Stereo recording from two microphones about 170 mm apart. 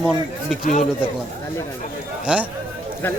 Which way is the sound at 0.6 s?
45° left (ahead or behind).